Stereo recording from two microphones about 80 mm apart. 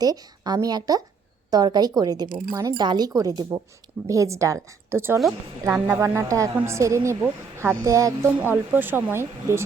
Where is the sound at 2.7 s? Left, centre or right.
Right.